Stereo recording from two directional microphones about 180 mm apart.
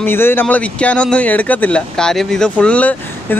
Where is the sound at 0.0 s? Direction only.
10° left (ahead or behind).